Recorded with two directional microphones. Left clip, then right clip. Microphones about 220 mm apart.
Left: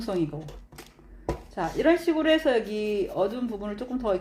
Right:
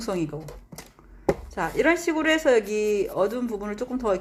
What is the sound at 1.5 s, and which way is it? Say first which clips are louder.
Speech: left 1 dB; 25° right (ahead or behind).